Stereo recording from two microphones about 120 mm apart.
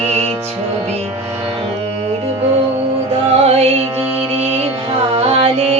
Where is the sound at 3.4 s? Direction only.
60° right (ahead or behind).